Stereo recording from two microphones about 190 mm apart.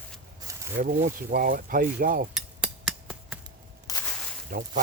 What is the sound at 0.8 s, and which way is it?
Speech, 45° right (ahead or behind).